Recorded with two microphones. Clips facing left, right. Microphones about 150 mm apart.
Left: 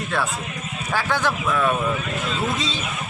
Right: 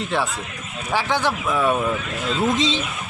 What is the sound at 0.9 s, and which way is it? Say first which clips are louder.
Speech: right 1 dB; 15° right (ahead or behind).